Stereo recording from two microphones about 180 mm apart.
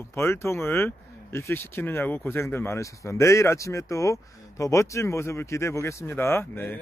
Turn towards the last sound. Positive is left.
turn(degrees=10)  # may be behind; listen again after turning